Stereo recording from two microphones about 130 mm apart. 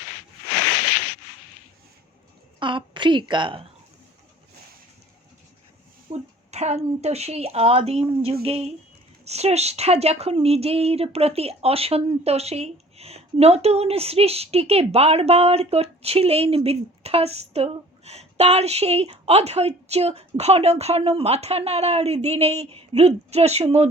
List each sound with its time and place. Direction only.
2.6 s a woman's voice: 40° right (ahead or behind)
6.1 s a woman's voice: 55° right (ahead or behind)